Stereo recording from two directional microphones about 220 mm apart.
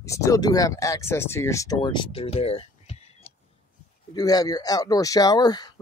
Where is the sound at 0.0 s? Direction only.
15° left (ahead or behind).